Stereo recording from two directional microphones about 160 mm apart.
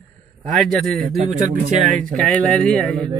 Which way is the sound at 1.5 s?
55° right (ahead or behind).